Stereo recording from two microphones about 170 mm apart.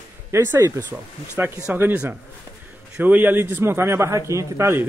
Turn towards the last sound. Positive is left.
turn(degrees=-15)  # may be behind; listen again after turning